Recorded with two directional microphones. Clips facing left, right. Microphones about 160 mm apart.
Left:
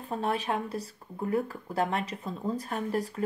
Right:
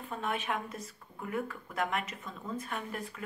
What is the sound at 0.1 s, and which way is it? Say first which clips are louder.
Speech: left 5 dB; 35° left (ahead or behind).